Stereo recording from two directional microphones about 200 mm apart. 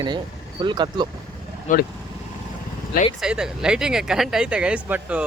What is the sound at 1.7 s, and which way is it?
Speech, 40° left (ahead or behind).